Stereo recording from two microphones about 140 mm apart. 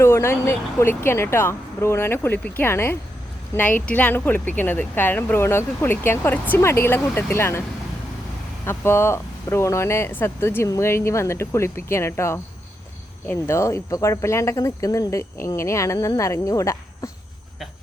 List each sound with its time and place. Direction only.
0.0 s speech: 20° left (ahead or behind)
8.6 s speech: 15° left (ahead or behind)